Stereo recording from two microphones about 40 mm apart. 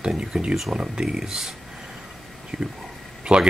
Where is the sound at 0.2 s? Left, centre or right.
Right.